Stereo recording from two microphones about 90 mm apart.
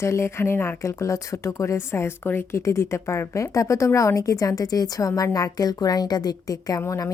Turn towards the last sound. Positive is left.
turn(degrees=40)  # may be behind; listen again after turning